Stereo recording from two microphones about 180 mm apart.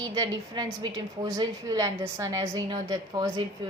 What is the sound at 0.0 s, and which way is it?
A woman's voice, 20° right (ahead or behind).